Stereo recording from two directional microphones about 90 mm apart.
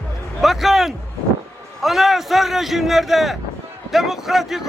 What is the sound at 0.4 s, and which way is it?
Speech, centre (ahead or behind).